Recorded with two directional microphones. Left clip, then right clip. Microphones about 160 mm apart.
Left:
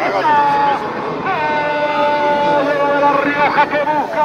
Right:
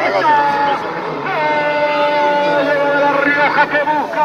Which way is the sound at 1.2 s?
55° left (ahead or behind).